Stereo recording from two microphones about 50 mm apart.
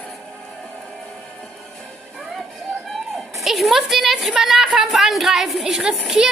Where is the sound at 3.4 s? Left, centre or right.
Centre.